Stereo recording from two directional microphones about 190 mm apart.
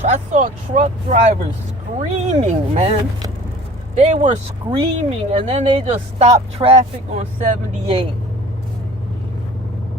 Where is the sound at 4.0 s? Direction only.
40° right (ahead or behind).